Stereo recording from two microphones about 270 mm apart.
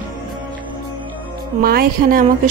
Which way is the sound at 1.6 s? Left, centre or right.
Right.